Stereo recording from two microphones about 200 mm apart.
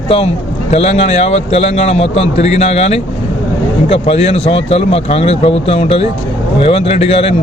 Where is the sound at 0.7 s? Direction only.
30° left (ahead or behind).